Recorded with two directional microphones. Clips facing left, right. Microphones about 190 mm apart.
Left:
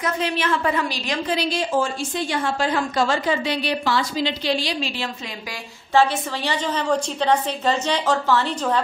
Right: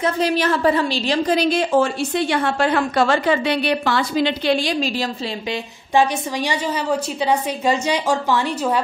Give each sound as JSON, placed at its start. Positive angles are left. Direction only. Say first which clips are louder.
{"t": 0.0, "sound": "a woman's voice", "louder": "right 5 dB", "side_deg": -40}
{"t": 1.3, "sound": "a woman's voice", "louder": "right 4 dB", "side_deg": -50}
{"t": 5.9, "sound": "a woman's voice", "louder": "right 1 dB", "side_deg": -10}